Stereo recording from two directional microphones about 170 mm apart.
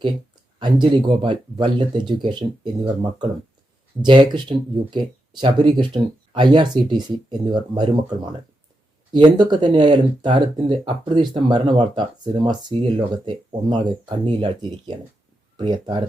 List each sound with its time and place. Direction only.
0.6 s speech: 25° right (ahead or behind)